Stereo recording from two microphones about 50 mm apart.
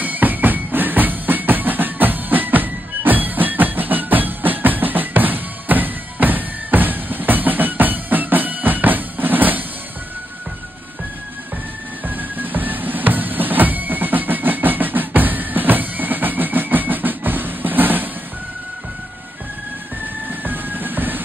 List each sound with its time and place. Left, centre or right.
0.0 s music: right
12.0 s music: right
20.2 s music: right